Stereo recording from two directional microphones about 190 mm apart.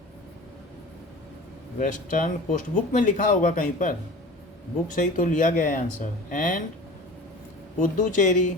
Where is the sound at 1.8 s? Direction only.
45° left (ahead or behind).